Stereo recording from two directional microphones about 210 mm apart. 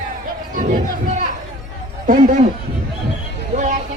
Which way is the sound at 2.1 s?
35° right (ahead or behind).